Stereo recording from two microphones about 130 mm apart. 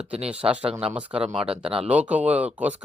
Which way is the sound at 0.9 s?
10° right (ahead or behind).